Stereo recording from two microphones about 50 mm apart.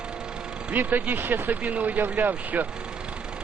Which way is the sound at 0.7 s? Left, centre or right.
Right.